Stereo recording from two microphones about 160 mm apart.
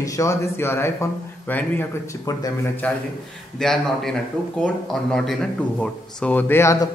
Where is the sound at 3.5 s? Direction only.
5° left (ahead or behind); by 6.9 s 20° left (ahead or behind).